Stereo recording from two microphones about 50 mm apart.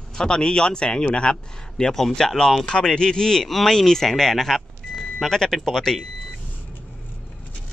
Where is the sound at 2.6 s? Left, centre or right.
Centre.